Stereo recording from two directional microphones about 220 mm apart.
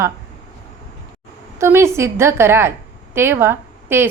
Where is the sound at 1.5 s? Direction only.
10° right (ahead or behind).